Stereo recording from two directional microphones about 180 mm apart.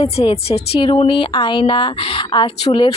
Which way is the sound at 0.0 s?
35° left (ahead or behind).